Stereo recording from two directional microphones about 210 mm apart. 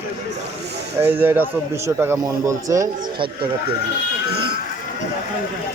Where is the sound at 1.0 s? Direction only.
10° right (ahead or behind).